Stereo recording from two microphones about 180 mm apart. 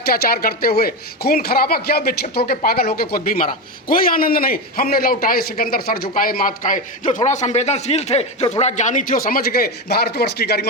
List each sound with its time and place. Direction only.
0.1 s a man's voice: 60° left (ahead or behind)